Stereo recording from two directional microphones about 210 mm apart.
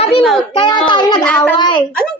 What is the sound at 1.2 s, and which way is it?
Speech, 5° left (ahead or behind).